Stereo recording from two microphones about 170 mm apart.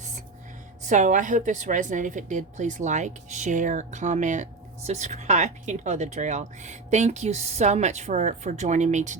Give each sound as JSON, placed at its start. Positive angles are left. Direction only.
{"t": 0.9, "sound": "speech", "side_deg": -45}